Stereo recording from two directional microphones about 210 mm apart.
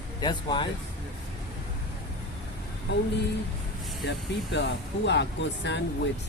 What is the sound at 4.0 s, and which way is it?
Speech, 55° left (ahead or behind).